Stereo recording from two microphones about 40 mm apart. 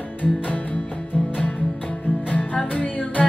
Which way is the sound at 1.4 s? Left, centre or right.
Left.